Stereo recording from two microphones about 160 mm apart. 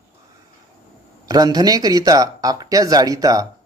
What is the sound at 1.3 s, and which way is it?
Speech, 25° right (ahead or behind).